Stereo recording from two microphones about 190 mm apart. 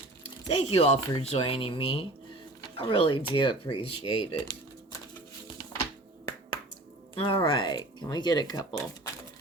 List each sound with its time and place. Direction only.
0.4 s speech: 35° left (ahead or behind)
7.2 s speech: 30° left (ahead or behind)